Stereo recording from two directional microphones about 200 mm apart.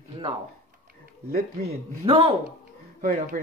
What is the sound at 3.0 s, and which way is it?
Speech, 45° right (ahead or behind).